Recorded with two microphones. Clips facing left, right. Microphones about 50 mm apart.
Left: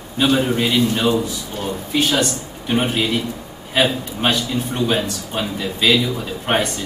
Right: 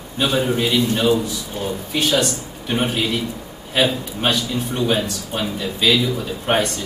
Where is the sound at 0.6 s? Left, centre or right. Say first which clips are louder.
Left 1 dB; centre.